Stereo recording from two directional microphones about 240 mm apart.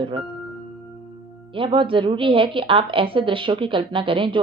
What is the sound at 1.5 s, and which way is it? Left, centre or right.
A woman's voice, right.